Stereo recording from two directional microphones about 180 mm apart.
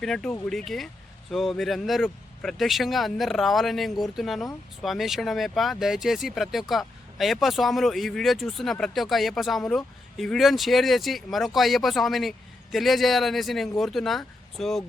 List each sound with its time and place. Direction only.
0.0 s speech: centre (ahead or behind)